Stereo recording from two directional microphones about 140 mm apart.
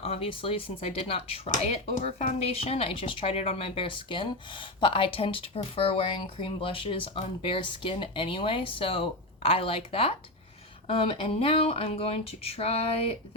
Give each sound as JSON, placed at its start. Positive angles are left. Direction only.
{"t": 0.0, "sound": "speech", "side_deg": 45}